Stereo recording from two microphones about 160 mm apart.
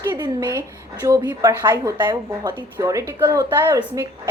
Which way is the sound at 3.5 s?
10° right (ahead or behind).